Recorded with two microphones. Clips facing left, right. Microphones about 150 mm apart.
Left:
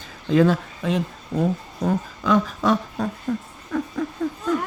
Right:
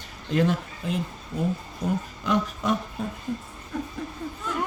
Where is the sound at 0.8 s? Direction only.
90° left.